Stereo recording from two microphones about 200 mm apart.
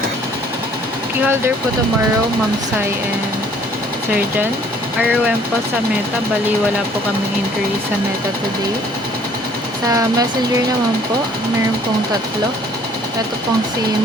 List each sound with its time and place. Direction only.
9.8 s speech: 20° right (ahead or behind)